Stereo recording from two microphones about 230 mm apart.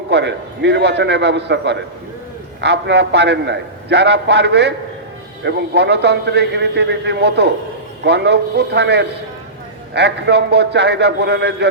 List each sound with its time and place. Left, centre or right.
0.1 s a man's voice: right